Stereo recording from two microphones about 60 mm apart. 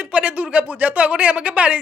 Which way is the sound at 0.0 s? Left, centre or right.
Right.